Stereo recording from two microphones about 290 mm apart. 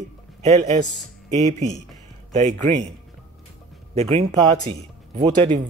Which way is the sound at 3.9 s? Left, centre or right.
Right.